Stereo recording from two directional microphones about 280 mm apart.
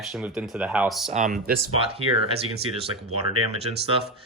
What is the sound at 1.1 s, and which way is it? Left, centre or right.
Speech, right.